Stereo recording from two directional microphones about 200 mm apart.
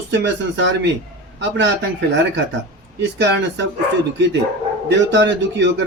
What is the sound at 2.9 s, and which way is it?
Speech, 60° right (ahead or behind).